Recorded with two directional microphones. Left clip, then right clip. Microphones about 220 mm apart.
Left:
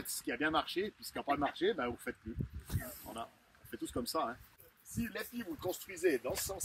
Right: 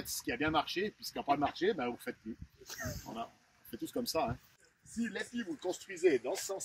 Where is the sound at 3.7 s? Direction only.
10° right (ahead or behind).